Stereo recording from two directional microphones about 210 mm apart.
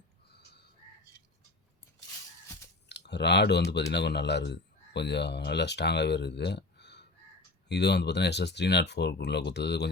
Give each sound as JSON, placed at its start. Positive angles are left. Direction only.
{"t": 0.3, "sound": "crow", "side_deg": 50}
{"t": 2.9, "sound": "speech", "side_deg": 55}